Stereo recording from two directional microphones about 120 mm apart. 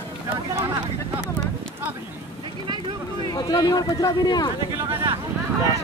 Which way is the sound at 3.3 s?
30° left (ahead or behind).